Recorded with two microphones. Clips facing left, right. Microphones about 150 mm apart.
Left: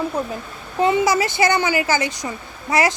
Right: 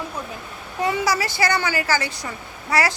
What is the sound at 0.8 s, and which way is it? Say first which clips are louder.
A woman's voice: left 5 dB; 20° left (ahead or behind).